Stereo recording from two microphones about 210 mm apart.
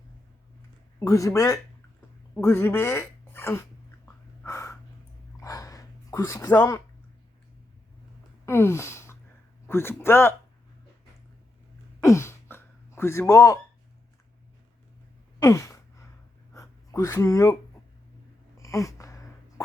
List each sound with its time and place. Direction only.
0.9 s speech: 15° left (ahead or behind)
4.4 s crow: 15° left (ahead or behind)
5.4 s a sound: 15° left (ahead or behind)
8.4 s a sound: 15° left (ahead or behind)
9.6 s speech: 10° left (ahead or behind)
11.9 s throat clearing: 15° left (ahead or behind)
15.4 s gasp: 15° left (ahead or behind)
16.6 s speech: 15° left (ahead or behind)
18.5 s a sound: 15° left (ahead or behind)